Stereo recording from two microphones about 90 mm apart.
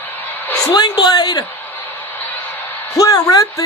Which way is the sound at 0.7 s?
50° left (ahead or behind).